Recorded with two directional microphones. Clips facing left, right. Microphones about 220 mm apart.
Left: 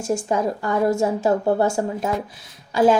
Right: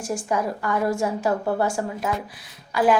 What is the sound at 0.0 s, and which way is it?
A woman's voice, 25° left (ahead or behind).